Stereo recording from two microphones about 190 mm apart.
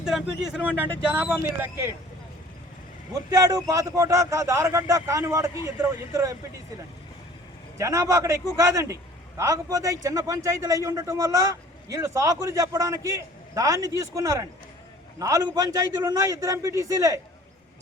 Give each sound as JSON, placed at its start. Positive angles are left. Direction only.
{"t": 0.0, "sound": "a man's voice", "side_deg": -5}
{"t": 3.2, "sound": "a man's voice", "side_deg": -15}
{"t": 7.8, "sound": "a man's voice", "side_deg": -15}